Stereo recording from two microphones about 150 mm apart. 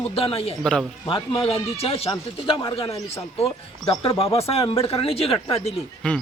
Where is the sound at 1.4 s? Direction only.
40° left (ahead or behind).